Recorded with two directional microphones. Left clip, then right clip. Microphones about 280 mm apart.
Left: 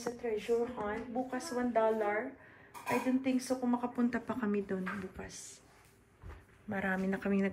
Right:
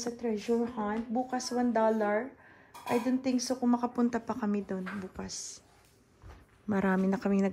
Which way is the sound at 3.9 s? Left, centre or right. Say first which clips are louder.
Right 4 dB; centre.